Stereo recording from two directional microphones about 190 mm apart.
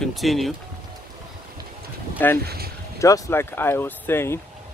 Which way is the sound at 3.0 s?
15° left (ahead or behind).